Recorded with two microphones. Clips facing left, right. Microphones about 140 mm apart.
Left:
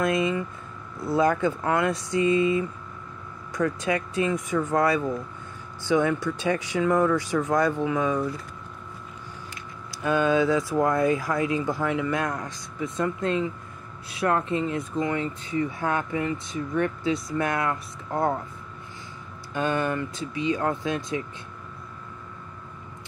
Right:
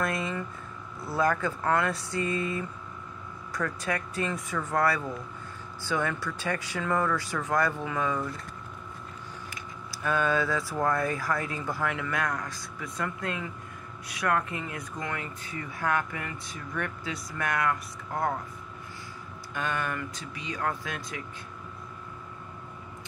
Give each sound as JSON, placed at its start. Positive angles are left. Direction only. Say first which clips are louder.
{"t": 0.0, "sound": "speech", "louder": "left 7 dB", "side_deg": 15}
{"t": 9.8, "sound": "speech", "louder": "left 5 dB", "side_deg": 20}
{"t": 19.5, "sound": "speech", "louder": "left 7 dB", "side_deg": 30}